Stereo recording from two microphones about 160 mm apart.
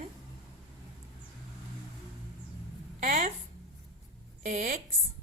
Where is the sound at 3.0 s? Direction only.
65° right (ahead or behind).